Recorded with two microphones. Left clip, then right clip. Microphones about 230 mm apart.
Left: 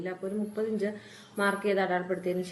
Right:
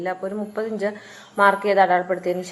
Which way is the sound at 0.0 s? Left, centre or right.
Centre.